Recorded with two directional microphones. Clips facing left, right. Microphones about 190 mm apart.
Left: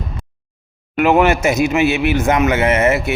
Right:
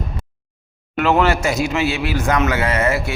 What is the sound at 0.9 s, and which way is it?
A man's voice, 15° left (ahead or behind).